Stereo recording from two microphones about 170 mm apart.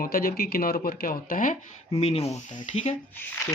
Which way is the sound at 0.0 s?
60° left (ahead or behind).